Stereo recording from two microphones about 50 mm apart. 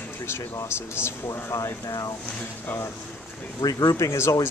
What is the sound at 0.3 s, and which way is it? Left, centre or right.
Speech, left.